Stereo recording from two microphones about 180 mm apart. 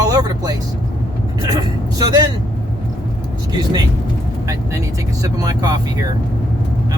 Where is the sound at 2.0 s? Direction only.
20° right (ahead or behind).